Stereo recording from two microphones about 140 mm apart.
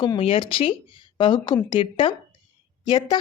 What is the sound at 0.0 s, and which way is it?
Speech, 35° left (ahead or behind).